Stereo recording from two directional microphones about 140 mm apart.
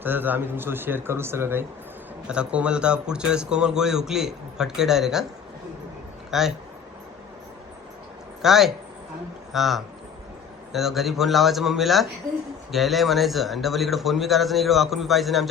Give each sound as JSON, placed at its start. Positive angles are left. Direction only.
{"t": 0.0, "sound": "speech", "side_deg": -15}
{"t": 6.3, "sound": "speech", "side_deg": -5}
{"t": 8.4, "sound": "speech", "side_deg": 0}